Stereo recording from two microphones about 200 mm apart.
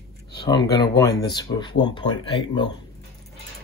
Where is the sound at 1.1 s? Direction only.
55° left (ahead or behind).